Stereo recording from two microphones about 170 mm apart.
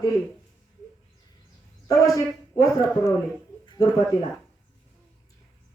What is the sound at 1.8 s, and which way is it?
Speech, 20° left (ahead or behind).